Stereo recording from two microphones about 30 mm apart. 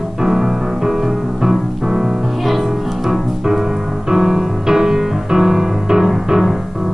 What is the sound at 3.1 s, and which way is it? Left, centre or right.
Music, centre.